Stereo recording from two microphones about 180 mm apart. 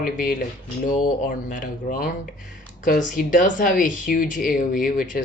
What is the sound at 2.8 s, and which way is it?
Speech, 50° left (ahead or behind).